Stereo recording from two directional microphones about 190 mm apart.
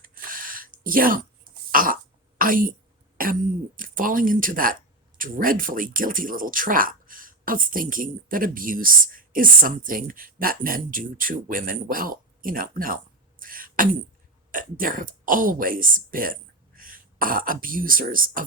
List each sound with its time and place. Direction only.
0.0 s a sound: 45° right (ahead or behind)
1.7 s throat clearing: 45° right (ahead or behind)
2.4 s a woman's voice: 45° right (ahead or behind)
13.4 s beatboxing: 45° right (ahead or behind)
14.5 s speech: 45° right (ahead or behind)